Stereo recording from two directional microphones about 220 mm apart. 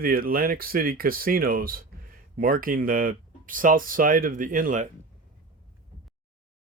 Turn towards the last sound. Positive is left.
turn(degrees=-35)  # may be behind; listen again after turning